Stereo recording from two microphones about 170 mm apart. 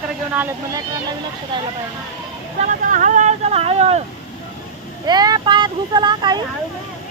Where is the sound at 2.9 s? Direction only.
50° right (ahead or behind).